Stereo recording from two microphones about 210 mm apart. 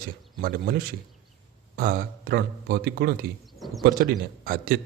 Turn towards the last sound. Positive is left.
turn(degrees=-45)  # may be behind; listen again after turning